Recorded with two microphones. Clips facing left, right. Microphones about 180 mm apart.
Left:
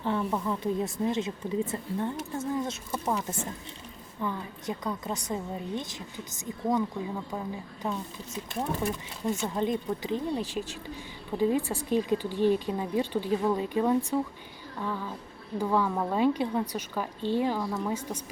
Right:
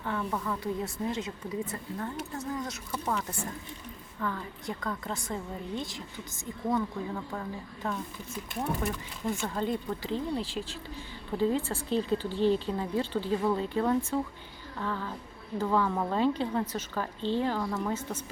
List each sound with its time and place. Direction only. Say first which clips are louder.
0.0 s a woman's voice: left 4 dB; 25° left (ahead or behind)
9.3 s a woman's voice: left 3 dB; 20° left (ahead or behind)